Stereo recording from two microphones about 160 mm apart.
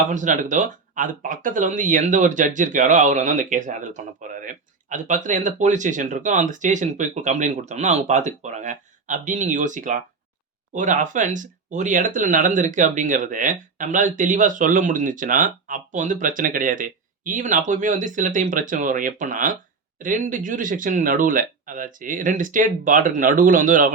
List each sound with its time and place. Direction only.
0.1 s speech: 50° right (ahead or behind)